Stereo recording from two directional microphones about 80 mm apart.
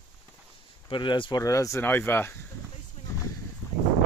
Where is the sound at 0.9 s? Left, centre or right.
Left.